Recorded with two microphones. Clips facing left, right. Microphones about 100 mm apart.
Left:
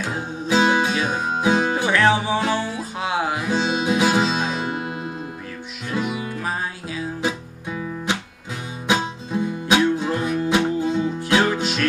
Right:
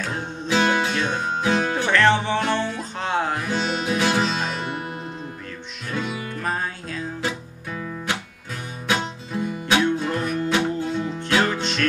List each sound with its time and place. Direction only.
0.0 s music: 10° left (ahead or behind)
7.2 s guitar: 20° left (ahead or behind)
8.8 s music: 20° left (ahead or behind)